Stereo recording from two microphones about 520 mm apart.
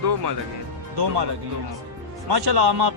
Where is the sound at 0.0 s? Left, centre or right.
Right.